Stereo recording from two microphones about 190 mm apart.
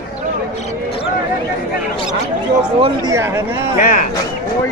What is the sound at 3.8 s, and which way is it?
Speech, 45° left (ahead or behind).